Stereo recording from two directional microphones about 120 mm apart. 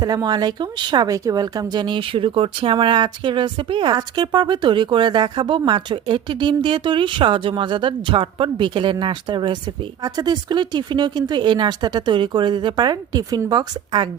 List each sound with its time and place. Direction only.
0.0 s speech: 35° right (ahead or behind)